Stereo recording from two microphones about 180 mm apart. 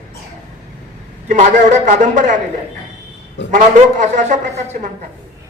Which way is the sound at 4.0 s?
45° right (ahead or behind).